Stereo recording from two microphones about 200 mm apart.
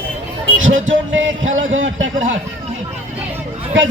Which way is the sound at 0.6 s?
70° right (ahead or behind).